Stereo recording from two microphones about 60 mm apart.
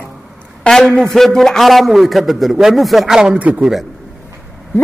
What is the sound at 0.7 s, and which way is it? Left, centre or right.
A man's voice, centre.